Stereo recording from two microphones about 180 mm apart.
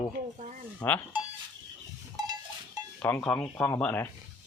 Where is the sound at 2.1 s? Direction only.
20° right (ahead or behind).